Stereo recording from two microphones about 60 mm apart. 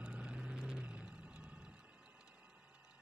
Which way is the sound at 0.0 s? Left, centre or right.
Centre.